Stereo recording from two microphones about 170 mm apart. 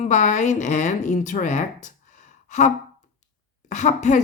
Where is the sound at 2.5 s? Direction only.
45° left (ahead or behind).